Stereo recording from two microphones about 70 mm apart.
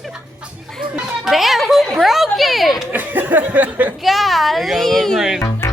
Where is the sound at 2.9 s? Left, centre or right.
Right.